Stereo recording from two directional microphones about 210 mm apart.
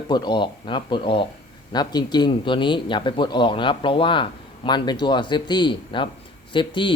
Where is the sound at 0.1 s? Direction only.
20° left (ahead or behind).